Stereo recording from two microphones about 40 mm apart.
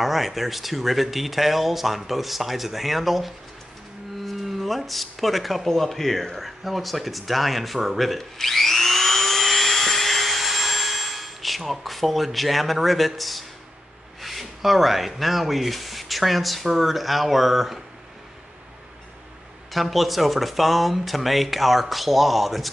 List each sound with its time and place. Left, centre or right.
0.0 s speech: centre
19.7 s speech: centre